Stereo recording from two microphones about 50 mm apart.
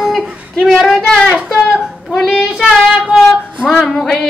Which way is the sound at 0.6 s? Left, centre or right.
Centre.